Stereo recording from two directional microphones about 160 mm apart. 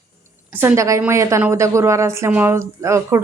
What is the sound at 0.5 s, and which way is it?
A woman's voice, 15° right (ahead or behind).